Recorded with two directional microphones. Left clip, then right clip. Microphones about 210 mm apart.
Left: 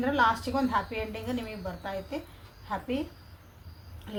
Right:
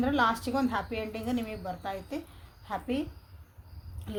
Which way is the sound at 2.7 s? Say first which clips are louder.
Left 1 dB; 55° right (ahead or behind).